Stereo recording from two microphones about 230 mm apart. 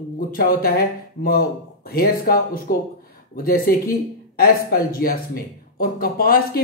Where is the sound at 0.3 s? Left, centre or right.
Left.